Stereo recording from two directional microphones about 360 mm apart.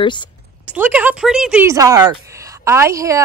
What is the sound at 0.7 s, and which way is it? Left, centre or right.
Speech, centre.